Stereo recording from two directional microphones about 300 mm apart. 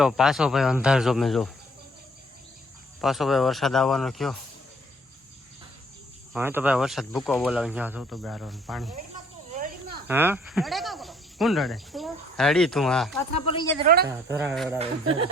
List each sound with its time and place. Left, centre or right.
0.0 s speech: centre
3.0 s speech: centre
6.3 s speech: centre
10.1 s cricket: centre
13.4 s a woman's voice: centre
13.8 s speech: right
14.1 s speech: centre
14.8 s speech: centre